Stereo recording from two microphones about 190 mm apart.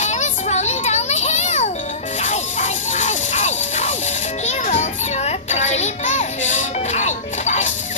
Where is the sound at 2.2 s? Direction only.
40° left (ahead or behind).